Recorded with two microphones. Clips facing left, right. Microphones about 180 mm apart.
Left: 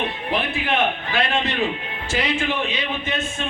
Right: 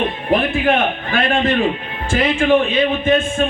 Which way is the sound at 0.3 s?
50° right (ahead or behind).